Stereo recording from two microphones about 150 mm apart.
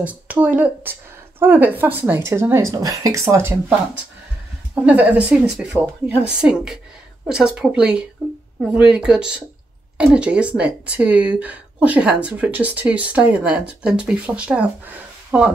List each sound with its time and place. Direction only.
0.0 s a woman's voice: 10° right (ahead or behind)